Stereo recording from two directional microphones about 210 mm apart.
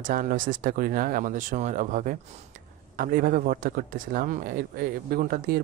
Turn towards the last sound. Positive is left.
turn(degrees=-45)  # may be behind; listen again after turning